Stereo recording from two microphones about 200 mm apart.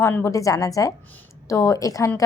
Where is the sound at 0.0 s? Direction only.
10° left (ahead or behind).